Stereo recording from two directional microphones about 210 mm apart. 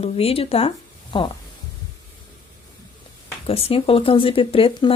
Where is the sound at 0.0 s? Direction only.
30° left (ahead or behind).